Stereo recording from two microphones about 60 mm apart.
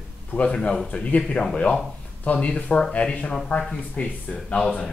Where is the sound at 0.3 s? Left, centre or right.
Left.